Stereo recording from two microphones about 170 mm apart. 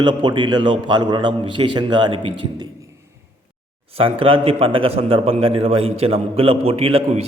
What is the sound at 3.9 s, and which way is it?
A man's voice, 35° right (ahead or behind).